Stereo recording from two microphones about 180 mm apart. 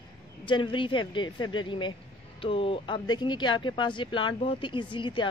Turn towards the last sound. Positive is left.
turn(degrees=25)  # may be behind; listen again after turning